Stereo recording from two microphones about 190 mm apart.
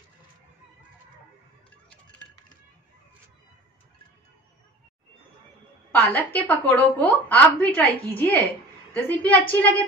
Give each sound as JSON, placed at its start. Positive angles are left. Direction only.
{"t": 5.9, "sound": "a woman's voice", "side_deg": 10}